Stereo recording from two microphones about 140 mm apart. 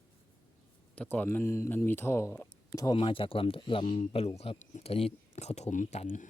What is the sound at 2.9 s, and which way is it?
Speech, 40° left (ahead or behind).